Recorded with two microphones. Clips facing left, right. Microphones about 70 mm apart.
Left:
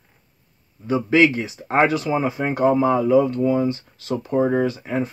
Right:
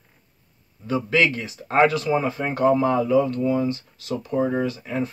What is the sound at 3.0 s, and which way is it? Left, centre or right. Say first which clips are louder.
Speech: left 3 dB; left.